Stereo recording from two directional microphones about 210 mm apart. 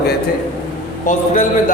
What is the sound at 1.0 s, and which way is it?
Speech, 35° left (ahead or behind).